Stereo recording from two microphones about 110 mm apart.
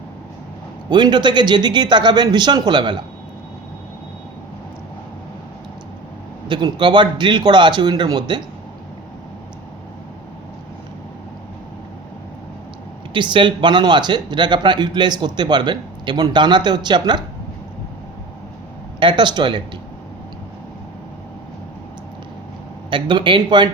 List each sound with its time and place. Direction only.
0.9 s speech: 40° right (ahead or behind)
6.5 s speech: 45° right (ahead or behind)
13.1 s speech: 45° right (ahead or behind)
18.9 s speech: 45° right (ahead or behind)
22.9 s speech: 45° right (ahead or behind)